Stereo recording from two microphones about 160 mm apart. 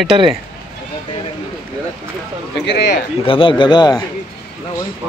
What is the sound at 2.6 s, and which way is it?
Speech, 90° left.